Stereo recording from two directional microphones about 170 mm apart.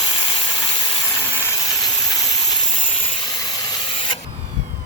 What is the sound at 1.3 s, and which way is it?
Steam, 15° left (ahead or behind).